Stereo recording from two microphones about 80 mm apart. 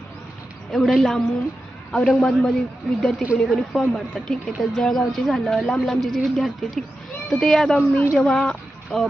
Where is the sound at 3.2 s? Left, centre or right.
Centre.